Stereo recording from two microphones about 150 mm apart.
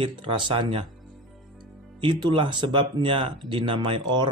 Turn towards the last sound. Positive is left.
turn(degrees=-30)  # may be behind; listen again after turning